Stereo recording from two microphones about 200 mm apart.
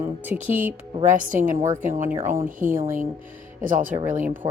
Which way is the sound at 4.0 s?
40° right (ahead or behind).